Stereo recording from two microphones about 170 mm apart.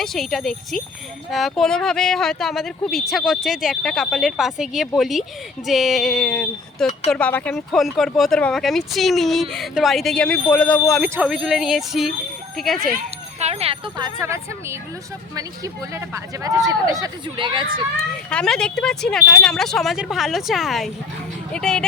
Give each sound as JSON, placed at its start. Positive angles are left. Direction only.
{"t": 0.0, "sound": "speech", "side_deg": 0}
{"t": 11.0, "sound": "speech", "side_deg": -5}
{"t": 13.4, "sound": "speech", "side_deg": -35}
{"t": 13.9, "sound": "a woman's voice", "side_deg": -20}
{"t": 18.3, "sound": "speech", "side_deg": 5}